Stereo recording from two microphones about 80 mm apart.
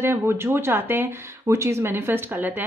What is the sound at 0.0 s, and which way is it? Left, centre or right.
Speech, right.